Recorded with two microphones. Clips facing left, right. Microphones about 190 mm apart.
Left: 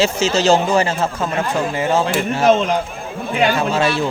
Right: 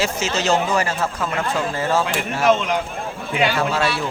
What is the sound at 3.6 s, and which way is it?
Speech, 20° left (ahead or behind).